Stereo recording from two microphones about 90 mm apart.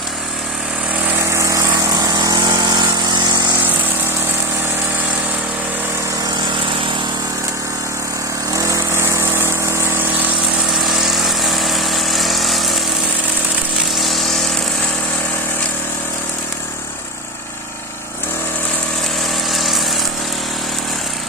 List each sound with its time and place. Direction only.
1.2 s vehicle: 30° right (ahead or behind)
2.0 s vehicle: 45° right (ahead or behind)
8.5 s vehicle: 35° right (ahead or behind)
10.8 s vehicle: centre (ahead or behind)
19.5 s vehicle: centre (ahead or behind)